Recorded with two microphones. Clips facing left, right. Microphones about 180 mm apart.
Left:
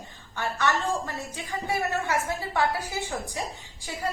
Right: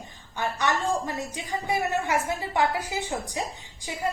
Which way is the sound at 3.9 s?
20° right (ahead or behind).